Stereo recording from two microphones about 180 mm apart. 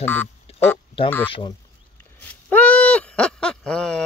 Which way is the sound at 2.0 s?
10° left (ahead or behind).